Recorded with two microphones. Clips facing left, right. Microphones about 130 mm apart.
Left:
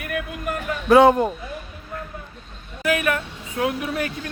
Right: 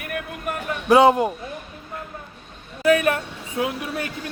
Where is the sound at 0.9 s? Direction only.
5° right (ahead or behind).